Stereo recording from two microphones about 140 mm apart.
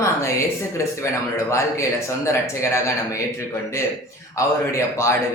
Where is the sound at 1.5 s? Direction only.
20° left (ahead or behind).